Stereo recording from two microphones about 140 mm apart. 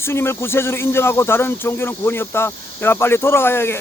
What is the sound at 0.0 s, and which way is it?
Speech, 15° left (ahead or behind).